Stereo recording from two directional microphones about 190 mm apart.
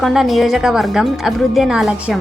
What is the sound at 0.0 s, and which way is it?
A woman's voice, centre (ahead or behind).